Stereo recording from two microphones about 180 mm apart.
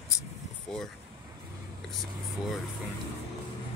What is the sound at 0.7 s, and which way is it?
Speech, 5° left (ahead or behind).